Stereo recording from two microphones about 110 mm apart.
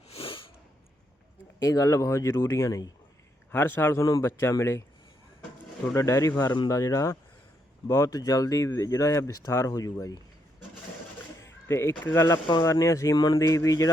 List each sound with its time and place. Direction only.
0.1 s sneeze: 55° left (ahead or behind)
1.5 s a man's voice: 30° left (ahead or behind)
3.5 s speech: 20° left (ahead or behind)
5.9 s a man's voice: 30° left (ahead or behind)
11.3 s a man's voice: 25° left (ahead or behind)